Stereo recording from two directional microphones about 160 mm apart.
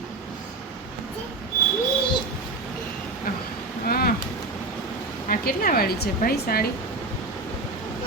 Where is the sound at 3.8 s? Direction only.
70° left (ahead or behind).